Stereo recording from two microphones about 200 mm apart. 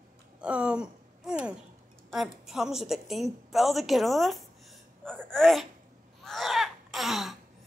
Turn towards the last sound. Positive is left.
turn(degrees=0)  # may be behind; listen again after turning